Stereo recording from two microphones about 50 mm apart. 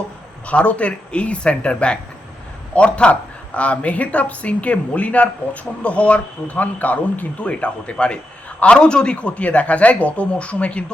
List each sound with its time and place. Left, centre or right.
0.4 s speech: left